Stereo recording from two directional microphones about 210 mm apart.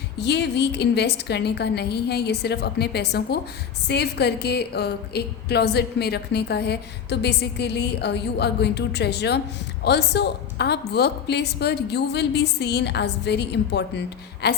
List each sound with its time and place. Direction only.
0.2 s a woman's voice: 55° left (ahead or behind)